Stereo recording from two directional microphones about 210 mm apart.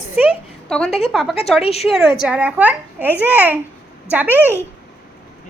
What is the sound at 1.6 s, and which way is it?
Speech, 30° left (ahead or behind).